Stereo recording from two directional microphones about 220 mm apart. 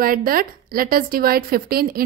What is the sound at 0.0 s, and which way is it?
A woman's voice, 40° right (ahead or behind).